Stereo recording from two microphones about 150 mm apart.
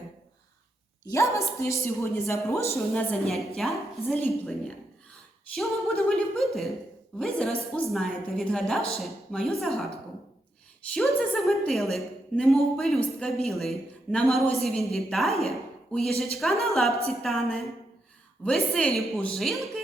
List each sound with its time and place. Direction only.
1.0 s a woman's voice: 20° left (ahead or behind)
2.9 s a woman's voice: 5° left (ahead or behind)
10.9 s a woman's voice: centre (ahead or behind)